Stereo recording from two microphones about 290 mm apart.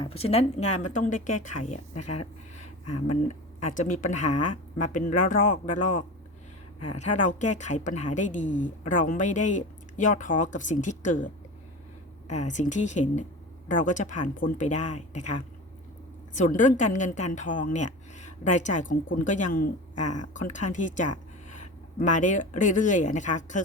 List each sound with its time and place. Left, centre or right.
0.0 s a woman's voice: centre
1.1 s speech: left
2.6 s a sound: left
3.2 s a woman's voice: left
12.3 s a woman's voice: left
20.0 s speech: left
20.3 s speech: left